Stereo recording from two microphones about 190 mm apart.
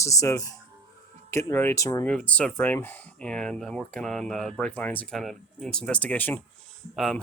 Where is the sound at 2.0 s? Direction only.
5° left (ahead or behind).